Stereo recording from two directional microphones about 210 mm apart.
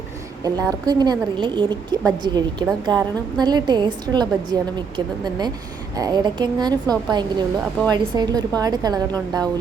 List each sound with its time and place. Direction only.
0.4 s a woman's voice: 15° right (ahead or behind)